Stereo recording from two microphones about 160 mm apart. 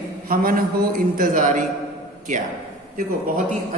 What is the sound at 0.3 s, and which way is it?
A man's voice, 65° right (ahead or behind).